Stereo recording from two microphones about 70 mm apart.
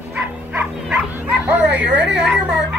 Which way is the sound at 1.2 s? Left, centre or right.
Right.